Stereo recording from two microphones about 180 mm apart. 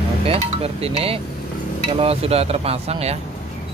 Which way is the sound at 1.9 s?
35° right (ahead or behind).